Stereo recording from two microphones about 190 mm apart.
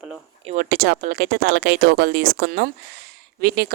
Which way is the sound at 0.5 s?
55° right (ahead or behind).